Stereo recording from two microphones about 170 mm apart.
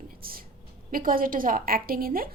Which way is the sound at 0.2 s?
60° right (ahead or behind).